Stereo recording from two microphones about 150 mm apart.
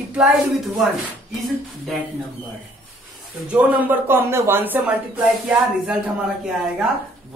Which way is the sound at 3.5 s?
10° right (ahead or behind).